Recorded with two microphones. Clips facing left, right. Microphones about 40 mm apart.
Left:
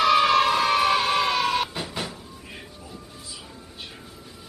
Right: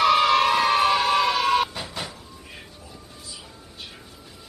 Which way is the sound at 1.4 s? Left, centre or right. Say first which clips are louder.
Right 3 dB; centre.